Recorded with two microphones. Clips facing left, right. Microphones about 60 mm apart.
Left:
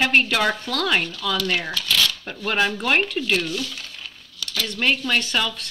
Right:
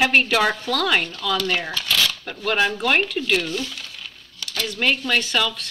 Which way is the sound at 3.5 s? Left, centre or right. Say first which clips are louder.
Right 1 dB; centre.